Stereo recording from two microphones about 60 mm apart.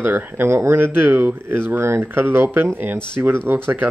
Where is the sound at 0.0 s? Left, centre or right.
Right.